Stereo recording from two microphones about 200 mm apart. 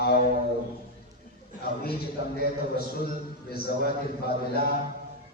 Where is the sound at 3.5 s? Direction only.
50° left (ahead or behind).